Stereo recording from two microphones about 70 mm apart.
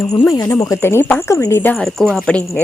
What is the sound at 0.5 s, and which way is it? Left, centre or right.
Speech, left.